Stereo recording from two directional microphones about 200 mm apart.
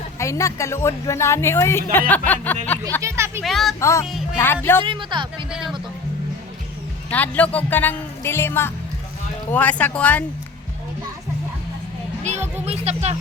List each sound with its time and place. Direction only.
0.2 s speech: 15° left (ahead or behind)
3.0 s speech: 15° right (ahead or behind)
3.4 s speech: centre (ahead or behind)
3.8 s speech: 15° left (ahead or behind)
4.9 s speech: 25° right (ahead or behind)
5.5 s speech: 5° right (ahead or behind)
7.1 s speech: 5° left (ahead or behind)
12.6 s speech: 30° right (ahead or behind)